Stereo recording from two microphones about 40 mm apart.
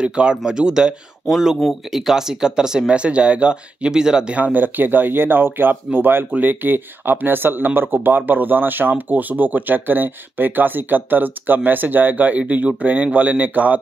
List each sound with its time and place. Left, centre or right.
0.0 s speech: right
2.9 s speech: right
3.9 s speech: centre
4.4 s speech: right
6.3 s speech: right
12.4 s speech: right